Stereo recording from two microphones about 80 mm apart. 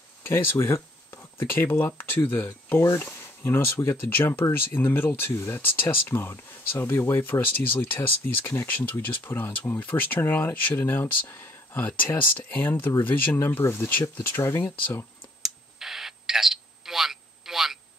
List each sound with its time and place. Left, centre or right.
0.2 s speech: left
15.4 s telephone: centre